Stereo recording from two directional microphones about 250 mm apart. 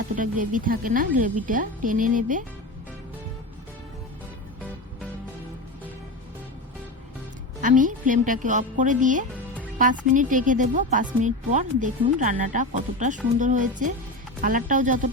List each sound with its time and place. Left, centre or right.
0.2 s a woman's voice: right
7.6 s a woman's voice: right